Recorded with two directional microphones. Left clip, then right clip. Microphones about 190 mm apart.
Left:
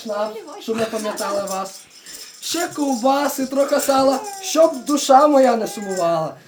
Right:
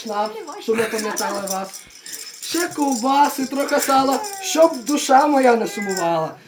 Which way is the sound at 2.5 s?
15° left (ahead or behind).